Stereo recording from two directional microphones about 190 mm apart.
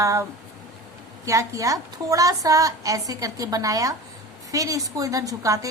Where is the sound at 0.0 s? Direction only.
15° right (ahead or behind).